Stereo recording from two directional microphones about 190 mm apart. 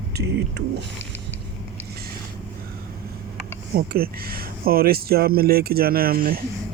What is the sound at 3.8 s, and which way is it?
Speech, 50° right (ahead or behind).